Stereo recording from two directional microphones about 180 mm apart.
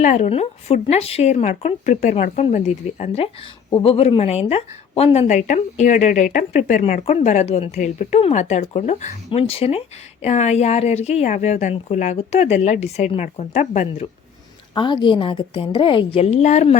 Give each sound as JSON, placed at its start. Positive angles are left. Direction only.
{"t": 0.0, "sound": "speech", "side_deg": 40}
{"t": 14.8, "sound": "a woman's voice", "side_deg": 25}